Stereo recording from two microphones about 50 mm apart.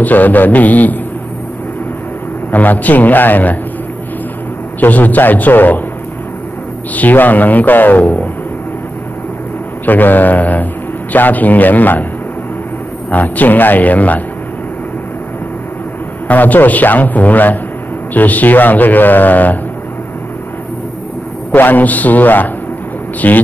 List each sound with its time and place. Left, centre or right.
0.0 s a man's voice: left
2.5 s a man's voice: left
4.7 s a man's voice: left
7.0 s a man's voice: left
9.8 s a man's voice: left
13.1 s a man's voice: left
16.3 s a man's voice: left
21.5 s a man's voice: left